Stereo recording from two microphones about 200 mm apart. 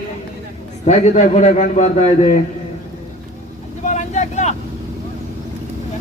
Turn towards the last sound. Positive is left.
turn(degrees=35)  # may be behind; listen again after turning